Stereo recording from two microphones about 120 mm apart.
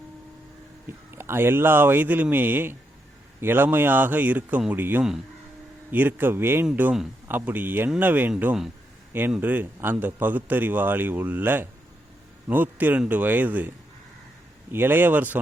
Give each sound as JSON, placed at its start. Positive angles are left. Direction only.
{"t": 1.1, "sound": "a man's voice", "side_deg": -20}